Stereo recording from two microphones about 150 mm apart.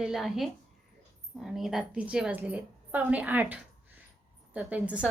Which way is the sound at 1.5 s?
Centre (ahead or behind).